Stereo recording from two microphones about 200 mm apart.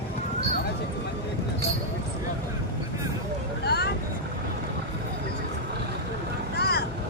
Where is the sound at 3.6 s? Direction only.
55° left (ahead or behind).